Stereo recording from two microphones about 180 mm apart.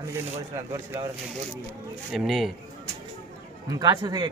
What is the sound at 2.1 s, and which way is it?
Speech, centre (ahead or behind).